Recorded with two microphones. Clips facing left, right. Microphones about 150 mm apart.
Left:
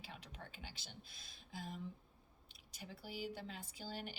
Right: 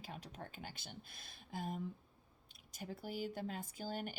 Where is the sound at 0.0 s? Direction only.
45° right (ahead or behind).